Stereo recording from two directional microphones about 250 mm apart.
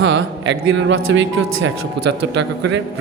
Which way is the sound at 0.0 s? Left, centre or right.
Right.